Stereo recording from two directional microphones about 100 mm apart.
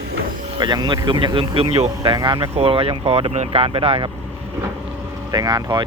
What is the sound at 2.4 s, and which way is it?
Speech, 70° right (ahead or behind).